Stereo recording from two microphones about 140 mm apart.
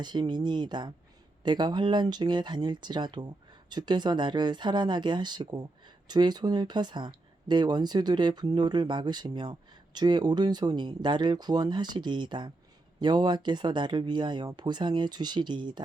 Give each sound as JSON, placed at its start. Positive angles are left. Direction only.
{"t": 0.0, "sound": "speech", "side_deg": -30}